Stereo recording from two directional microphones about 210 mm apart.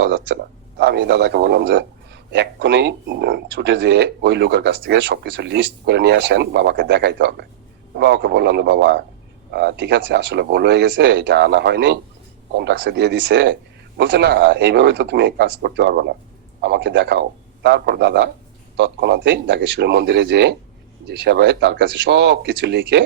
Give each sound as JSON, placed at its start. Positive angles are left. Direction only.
{"t": 0.8, "sound": "a man's voice", "side_deg": -50}